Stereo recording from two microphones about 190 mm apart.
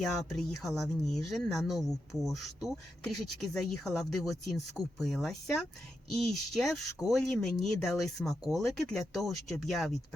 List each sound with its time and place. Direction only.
0.0 s speech: centre (ahead or behind)